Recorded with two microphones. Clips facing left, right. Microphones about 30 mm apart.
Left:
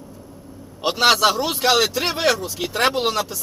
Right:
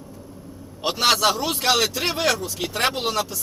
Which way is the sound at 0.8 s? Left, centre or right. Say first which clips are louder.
Left 3 dB; centre.